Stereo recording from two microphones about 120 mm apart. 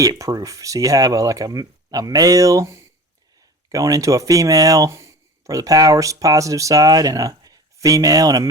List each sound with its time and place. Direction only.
0.0 s speech: 30° right (ahead or behind)